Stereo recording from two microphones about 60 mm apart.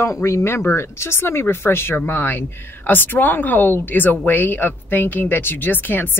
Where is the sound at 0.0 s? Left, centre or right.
Left.